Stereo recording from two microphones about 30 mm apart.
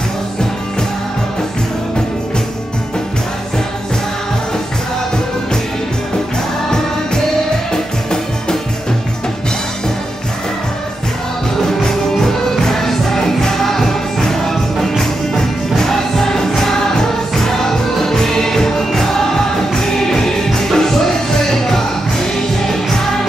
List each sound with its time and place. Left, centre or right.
7.7 s music: centre
11.6 s music: centre
20.4 s music: centre